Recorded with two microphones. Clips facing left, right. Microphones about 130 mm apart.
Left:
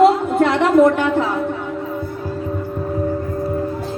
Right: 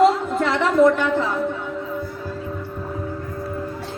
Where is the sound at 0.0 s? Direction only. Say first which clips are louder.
Left 4 dB; 60° left (ahead or behind).